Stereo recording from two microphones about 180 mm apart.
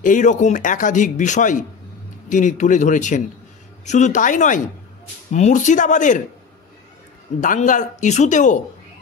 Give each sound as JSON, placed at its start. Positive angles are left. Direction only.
{"t": 0.0, "sound": "speech", "side_deg": 45}
{"t": 7.3, "sound": "speech", "side_deg": 45}